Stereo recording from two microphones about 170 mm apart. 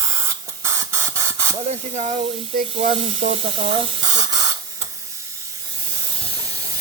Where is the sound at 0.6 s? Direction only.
15° right (ahead or behind).